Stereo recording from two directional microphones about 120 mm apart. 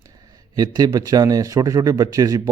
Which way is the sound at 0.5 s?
35° right (ahead or behind).